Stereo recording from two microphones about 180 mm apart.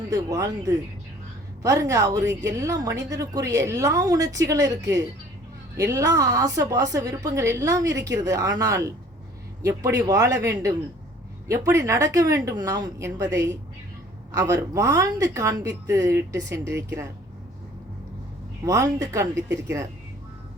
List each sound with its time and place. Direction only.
0.1 s a woman's voice: 20° right (ahead or behind)
10.1 s a woman's voice: 20° right (ahead or behind)
18.6 s a woman's voice: 20° right (ahead or behind)